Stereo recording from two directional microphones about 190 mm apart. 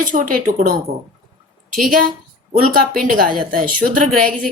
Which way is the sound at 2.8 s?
45° right (ahead or behind).